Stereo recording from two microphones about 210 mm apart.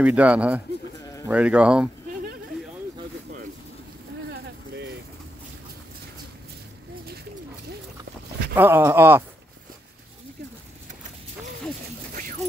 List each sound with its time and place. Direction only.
0.0 s speech: 5° right (ahead or behind)
4.3 s a sound: 55° right (ahead or behind)
8.5 s speech: 10° right (ahead or behind)
12.1 s dog: 40° right (ahead or behind)